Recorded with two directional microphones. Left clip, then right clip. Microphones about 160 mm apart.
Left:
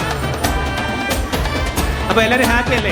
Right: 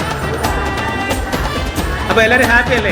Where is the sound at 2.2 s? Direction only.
25° left (ahead or behind).